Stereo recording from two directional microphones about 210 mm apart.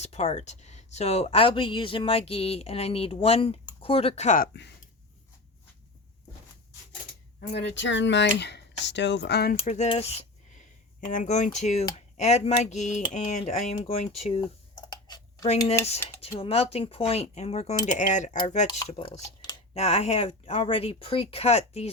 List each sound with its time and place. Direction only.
0.0 s speech: 30° left (ahead or behind)
7.5 s speech: 55° left (ahead or behind)
9.6 s speech: 30° left (ahead or behind)